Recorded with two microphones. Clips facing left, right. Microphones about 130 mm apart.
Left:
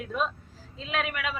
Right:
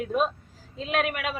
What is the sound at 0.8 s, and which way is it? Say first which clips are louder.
Speech: right 4 dB; 50° right (ahead or behind).